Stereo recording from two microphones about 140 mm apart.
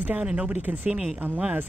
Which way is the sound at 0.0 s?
10° right (ahead or behind).